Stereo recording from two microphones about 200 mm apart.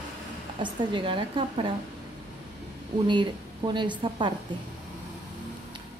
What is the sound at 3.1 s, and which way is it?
A woman's voice, 25° right (ahead or behind).